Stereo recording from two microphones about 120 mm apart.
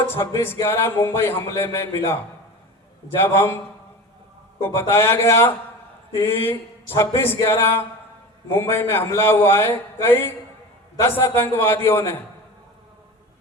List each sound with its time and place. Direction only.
0.1 s speech: 20° left (ahead or behind)
4.6 s speech: 20° left (ahead or behind)